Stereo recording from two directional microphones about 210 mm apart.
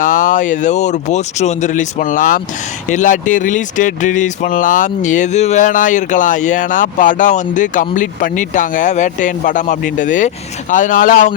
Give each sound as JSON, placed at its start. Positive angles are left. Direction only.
{"t": 0.0, "sound": "speech", "side_deg": 40}